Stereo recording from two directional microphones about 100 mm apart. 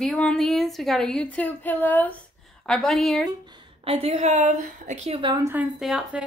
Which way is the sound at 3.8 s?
80° right.